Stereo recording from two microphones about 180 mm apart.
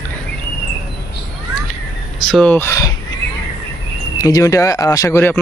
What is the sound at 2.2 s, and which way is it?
Speech, centre (ahead or behind).